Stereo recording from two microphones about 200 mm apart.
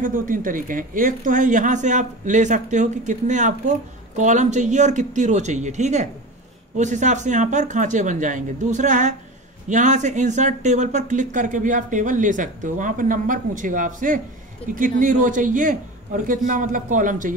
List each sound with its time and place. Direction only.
0.0 s speech: 45° right (ahead or behind)